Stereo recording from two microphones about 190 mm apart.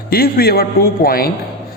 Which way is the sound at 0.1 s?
50° left (ahead or behind).